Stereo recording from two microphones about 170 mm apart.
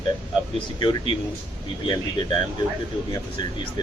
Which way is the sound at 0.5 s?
30° left (ahead or behind).